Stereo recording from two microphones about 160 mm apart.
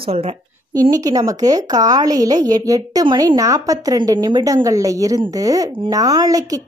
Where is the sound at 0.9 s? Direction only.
20° right (ahead or behind).